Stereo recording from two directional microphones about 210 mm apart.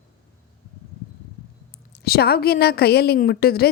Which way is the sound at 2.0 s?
50° left (ahead or behind).